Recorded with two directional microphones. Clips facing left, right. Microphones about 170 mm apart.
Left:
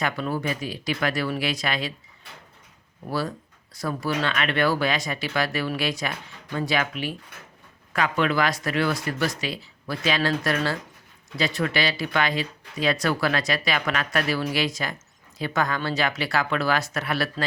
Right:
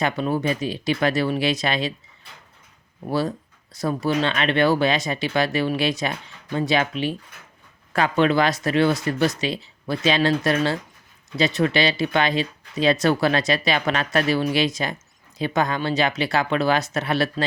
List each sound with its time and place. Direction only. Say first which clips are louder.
0.0 s speech: right 4 dB; 25° right (ahead or behind)
3.0 s speech: right 4 dB; 20° right (ahead or behind)